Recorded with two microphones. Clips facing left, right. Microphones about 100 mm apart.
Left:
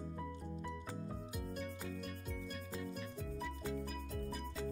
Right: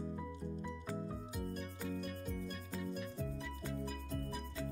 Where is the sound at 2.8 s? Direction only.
5° right (ahead or behind).